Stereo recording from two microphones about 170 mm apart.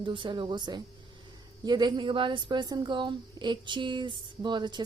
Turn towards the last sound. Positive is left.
turn(degrees=-25)  # may be behind; listen again after turning